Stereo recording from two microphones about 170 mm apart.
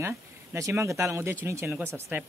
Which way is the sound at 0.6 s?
15° right (ahead or behind).